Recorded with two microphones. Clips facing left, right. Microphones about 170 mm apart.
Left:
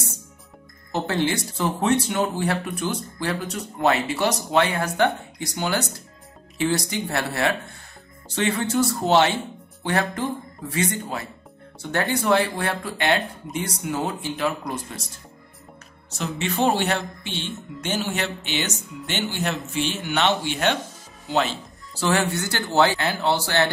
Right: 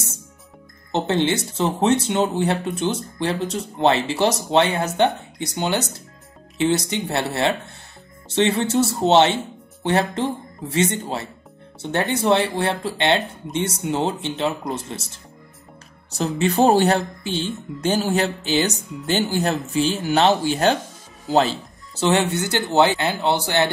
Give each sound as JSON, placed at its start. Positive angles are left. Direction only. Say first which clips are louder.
{"t": 0.9, "sound": "speech", "louder": "right 3 dB", "side_deg": -25}
{"t": 16.1, "sound": "speech", "louder": "right 6 dB", "side_deg": -35}
{"t": 21.9, "sound": "speech", "louder": "right 3 dB", "side_deg": -20}